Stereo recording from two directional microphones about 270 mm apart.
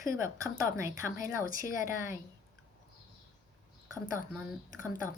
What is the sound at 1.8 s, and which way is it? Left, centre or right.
Speech, centre.